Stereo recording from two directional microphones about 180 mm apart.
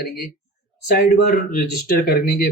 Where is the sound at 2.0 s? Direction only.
55° left (ahead or behind).